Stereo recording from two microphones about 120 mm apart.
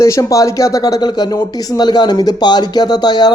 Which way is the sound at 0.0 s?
25° left (ahead or behind).